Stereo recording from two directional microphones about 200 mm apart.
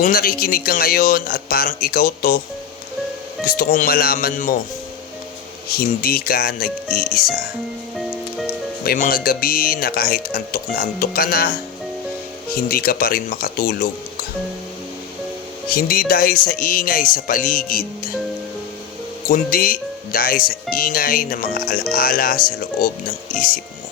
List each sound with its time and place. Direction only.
0.0 s speech: 45° left (ahead or behind)
3.4 s speech: 50° left (ahead or behind)
5.7 s speech: 45° left (ahead or behind)
7.9 s music: centre (ahead or behind)
8.8 s speech: 50° left (ahead or behind)
12.6 s speech: 45° left (ahead or behind)
15.7 s speech: 45° left (ahead or behind)
19.3 s speech: 45° left (ahead or behind)